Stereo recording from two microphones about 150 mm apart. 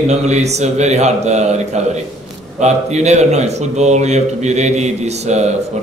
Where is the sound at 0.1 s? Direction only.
45° right (ahead or behind).